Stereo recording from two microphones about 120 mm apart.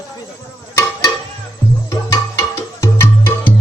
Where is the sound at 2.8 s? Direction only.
20° left (ahead or behind).